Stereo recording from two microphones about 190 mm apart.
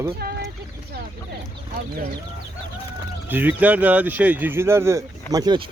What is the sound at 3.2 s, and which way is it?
Speech, 10° right (ahead or behind).